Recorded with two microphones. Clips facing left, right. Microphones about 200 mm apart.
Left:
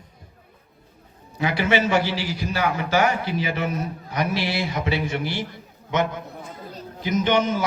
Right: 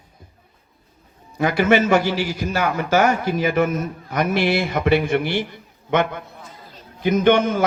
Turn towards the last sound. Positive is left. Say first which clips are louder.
# right 5 dB
turn(degrees=-55)  # may be behind; listen again after turning